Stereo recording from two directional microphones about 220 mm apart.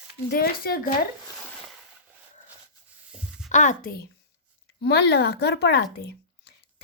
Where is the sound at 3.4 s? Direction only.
35° left (ahead or behind).